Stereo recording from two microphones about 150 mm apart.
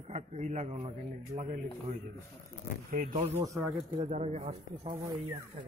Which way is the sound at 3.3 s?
15° right (ahead or behind).